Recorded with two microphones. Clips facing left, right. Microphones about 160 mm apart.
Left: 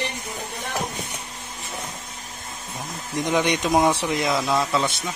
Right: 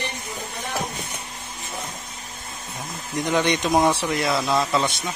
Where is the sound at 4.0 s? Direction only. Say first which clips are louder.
Even; 20° left (ahead or behind).